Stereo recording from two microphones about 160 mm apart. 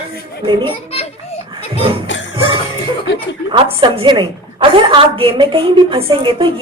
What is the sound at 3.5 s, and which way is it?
A woman's voice, 30° right (ahead or behind).